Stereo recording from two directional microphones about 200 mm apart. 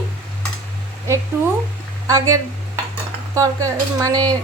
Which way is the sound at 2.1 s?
15° right (ahead or behind).